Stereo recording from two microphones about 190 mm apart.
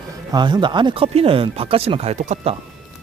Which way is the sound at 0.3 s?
20° right (ahead or behind).